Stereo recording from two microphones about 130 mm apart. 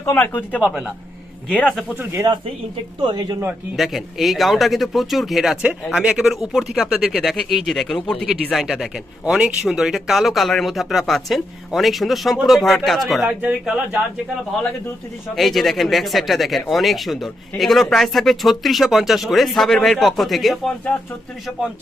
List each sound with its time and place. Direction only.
0.0 s speech: 15° left (ahead or behind)
0.6 s speech: 5° right (ahead or behind)
1.5 s speech: 10° left (ahead or behind)
3.0 s speech: 35° right (ahead or behind)
3.8 s speech: centre (ahead or behind)
15.4 s speech: centre (ahead or behind)